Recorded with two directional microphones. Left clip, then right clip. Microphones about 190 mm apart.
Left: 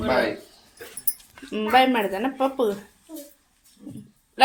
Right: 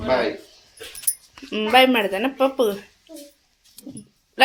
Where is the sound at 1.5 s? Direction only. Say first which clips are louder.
Right 3 dB; 15° right (ahead or behind).